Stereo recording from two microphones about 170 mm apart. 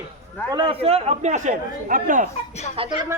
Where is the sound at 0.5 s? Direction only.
30° right (ahead or behind); by 2.2 s 50° right (ahead or behind).